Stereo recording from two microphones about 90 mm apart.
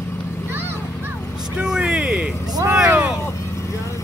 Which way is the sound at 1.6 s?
10° right (ahead or behind).